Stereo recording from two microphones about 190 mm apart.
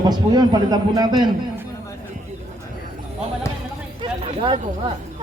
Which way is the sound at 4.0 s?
25° right (ahead or behind).